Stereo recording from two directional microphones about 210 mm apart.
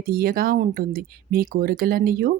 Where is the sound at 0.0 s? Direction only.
45° right (ahead or behind).